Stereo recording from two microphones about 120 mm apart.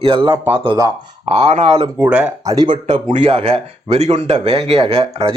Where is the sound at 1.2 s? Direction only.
55° right (ahead or behind).